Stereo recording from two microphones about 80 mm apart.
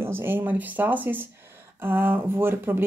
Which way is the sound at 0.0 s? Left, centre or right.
Right.